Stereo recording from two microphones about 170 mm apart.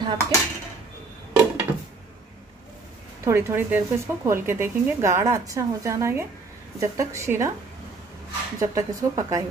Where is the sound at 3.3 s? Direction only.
15° right (ahead or behind).